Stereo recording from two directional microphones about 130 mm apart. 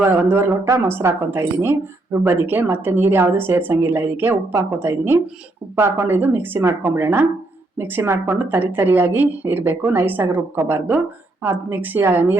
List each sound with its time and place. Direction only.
0.0 s a woman's voice: 15° right (ahead or behind)